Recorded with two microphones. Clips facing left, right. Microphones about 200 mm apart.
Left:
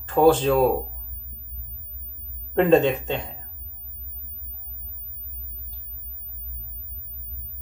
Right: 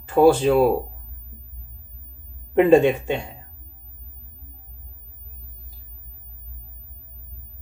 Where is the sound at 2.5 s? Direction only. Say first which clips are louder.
Right 3 dB; 10° right (ahead or behind).